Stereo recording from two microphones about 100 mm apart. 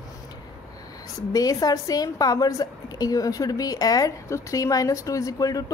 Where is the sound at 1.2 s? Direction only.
35° left (ahead or behind).